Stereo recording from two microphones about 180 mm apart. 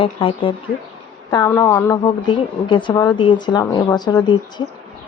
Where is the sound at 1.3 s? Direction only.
20° left (ahead or behind).